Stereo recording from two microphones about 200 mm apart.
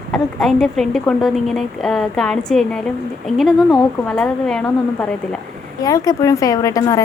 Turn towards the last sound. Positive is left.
turn(degrees=15)  # may be behind; listen again after turning